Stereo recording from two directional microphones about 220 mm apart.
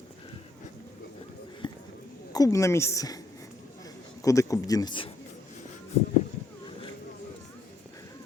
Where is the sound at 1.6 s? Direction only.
20° left (ahead or behind).